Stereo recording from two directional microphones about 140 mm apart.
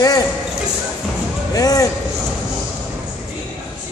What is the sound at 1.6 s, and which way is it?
Speech, 25° left (ahead or behind).